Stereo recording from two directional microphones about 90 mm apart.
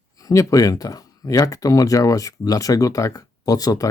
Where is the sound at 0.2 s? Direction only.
40° left (ahead or behind).